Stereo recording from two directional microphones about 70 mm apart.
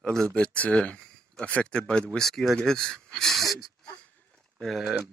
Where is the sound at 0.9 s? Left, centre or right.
Centre.